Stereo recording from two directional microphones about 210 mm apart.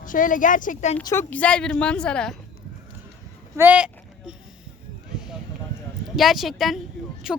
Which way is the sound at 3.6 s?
5° right (ahead or behind).